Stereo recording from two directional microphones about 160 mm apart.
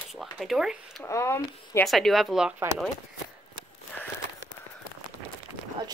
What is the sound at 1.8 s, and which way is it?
Speech, centre (ahead or behind).